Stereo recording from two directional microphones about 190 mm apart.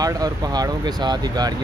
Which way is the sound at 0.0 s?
20° right (ahead or behind).